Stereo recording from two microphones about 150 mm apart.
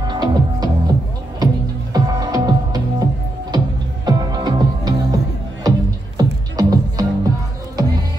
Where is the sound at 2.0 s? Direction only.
25° right (ahead or behind).